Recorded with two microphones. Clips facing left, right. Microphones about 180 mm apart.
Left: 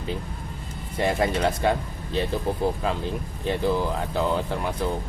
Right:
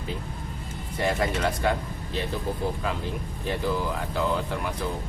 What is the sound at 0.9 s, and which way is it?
Speech, 25° left (ahead or behind).